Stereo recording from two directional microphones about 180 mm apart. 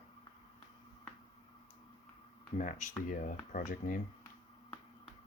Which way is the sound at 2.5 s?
45° left (ahead or behind).